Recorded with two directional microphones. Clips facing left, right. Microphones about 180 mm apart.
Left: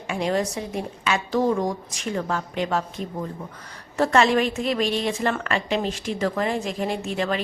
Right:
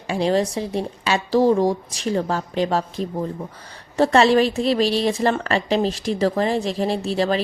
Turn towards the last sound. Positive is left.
turn(degrees=-35)  # may be behind; listen again after turning